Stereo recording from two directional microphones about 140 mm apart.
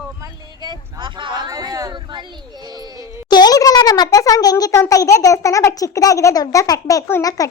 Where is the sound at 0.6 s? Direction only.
35° right (ahead or behind).